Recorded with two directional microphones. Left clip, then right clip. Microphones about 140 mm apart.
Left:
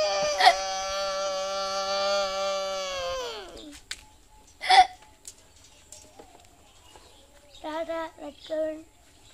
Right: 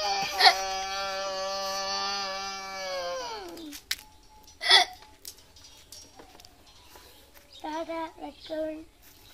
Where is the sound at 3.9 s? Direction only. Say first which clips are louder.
Right 6 dB; 90° right.